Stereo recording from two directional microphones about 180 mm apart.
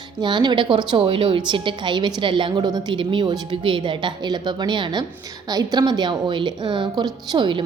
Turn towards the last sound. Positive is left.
turn(degrees=-25)  # may be behind; listen again after turning